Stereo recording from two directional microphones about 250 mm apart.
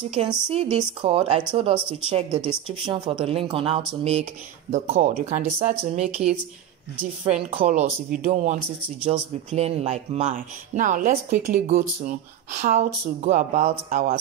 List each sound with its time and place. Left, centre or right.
0.1 s speech: right
7.5 s speech: right